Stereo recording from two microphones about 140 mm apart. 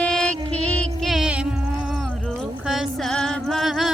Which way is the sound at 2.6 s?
Centre (ahead or behind).